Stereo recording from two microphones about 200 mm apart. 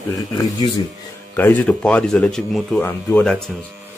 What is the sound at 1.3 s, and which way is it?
A man's voice, 10° left (ahead or behind).